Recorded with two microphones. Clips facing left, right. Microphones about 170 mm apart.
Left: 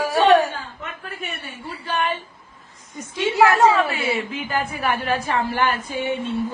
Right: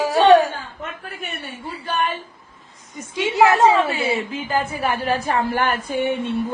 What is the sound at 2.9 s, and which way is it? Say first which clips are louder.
A woman's voice: right 1 dB; 15° right (ahead or behind).